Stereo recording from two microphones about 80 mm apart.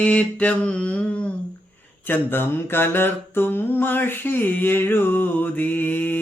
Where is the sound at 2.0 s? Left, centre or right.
Left.